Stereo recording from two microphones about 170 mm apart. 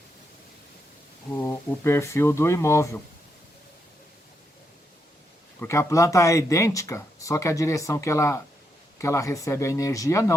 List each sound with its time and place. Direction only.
1.3 s speech: 15° left (ahead or behind)
5.5 s speech: 15° left (ahead or behind)